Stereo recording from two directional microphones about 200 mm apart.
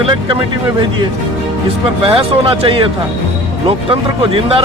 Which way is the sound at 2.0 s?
25° right (ahead or behind).